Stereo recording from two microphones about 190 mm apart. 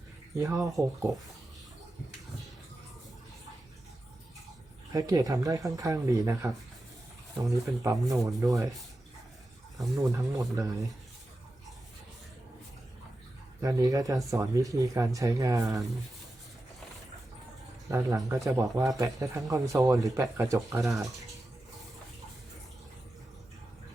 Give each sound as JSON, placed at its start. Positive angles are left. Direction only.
{"t": 0.3, "sound": "speech", "side_deg": -15}
{"t": 4.9, "sound": "speech", "side_deg": -20}
{"t": 7.5, "sound": "speech", "side_deg": -15}
{"t": 10.0, "sound": "speech", "side_deg": -15}
{"t": 13.6, "sound": "speech", "side_deg": -20}
{"t": 17.8, "sound": "speech", "side_deg": -15}